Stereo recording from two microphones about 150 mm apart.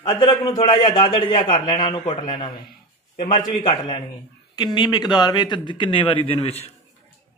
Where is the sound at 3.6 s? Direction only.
30° left (ahead or behind).